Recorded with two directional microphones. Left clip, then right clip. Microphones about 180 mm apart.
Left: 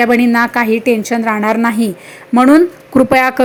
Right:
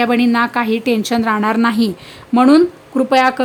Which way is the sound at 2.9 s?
20° left (ahead or behind).